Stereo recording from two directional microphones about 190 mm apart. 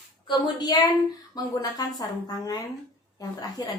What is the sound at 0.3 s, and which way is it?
A child's voice, 20° left (ahead or behind).